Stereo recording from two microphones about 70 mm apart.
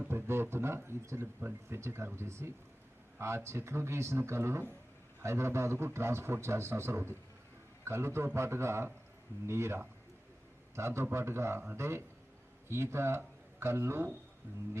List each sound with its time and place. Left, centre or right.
0.1 s a man's voice: right